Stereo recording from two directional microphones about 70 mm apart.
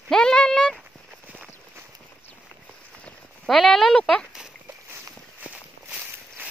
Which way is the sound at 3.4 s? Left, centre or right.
Centre.